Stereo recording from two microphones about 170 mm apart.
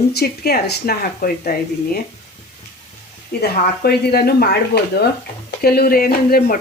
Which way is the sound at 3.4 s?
65° left (ahead or behind).